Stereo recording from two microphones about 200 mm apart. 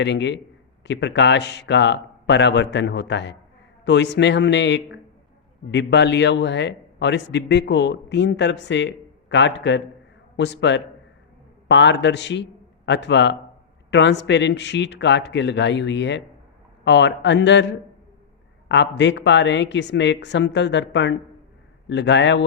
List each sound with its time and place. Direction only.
0.0 s a man's voice: 60° left (ahead or behind)